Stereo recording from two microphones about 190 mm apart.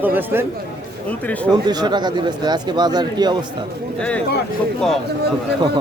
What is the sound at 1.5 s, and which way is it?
Speech, 20° right (ahead or behind).